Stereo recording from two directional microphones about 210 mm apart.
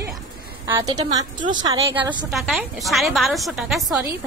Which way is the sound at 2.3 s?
Centre (ahead or behind).